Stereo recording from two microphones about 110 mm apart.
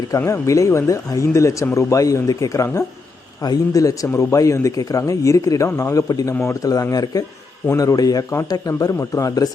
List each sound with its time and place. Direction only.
0.2 s a man's voice: 25° left (ahead or behind)